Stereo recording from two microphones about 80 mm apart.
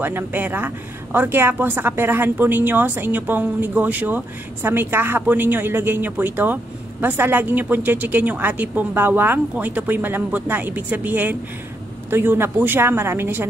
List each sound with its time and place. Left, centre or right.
0.0 s a woman's voice: right